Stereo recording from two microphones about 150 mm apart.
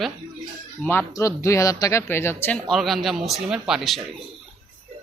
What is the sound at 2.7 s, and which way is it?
Speech, centre (ahead or behind).